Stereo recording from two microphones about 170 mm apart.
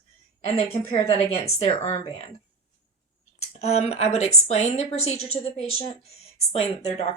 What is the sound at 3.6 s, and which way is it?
A woman's voice, 40° left (ahead or behind).